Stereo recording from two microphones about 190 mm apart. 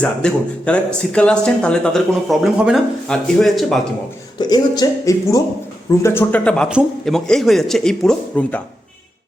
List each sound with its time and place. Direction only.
0.0 s speech: 5° left (ahead or behind)
4.4 s speech: 20° left (ahead or behind)